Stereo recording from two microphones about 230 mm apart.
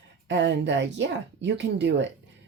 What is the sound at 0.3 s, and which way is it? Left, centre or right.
Speech, right.